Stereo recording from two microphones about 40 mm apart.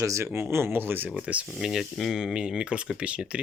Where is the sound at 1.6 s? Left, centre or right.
Centre.